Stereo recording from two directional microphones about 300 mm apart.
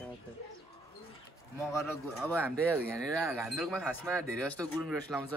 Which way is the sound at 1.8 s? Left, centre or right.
Centre.